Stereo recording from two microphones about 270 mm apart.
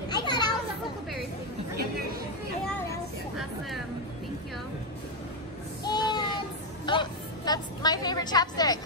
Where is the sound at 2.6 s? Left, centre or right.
Centre.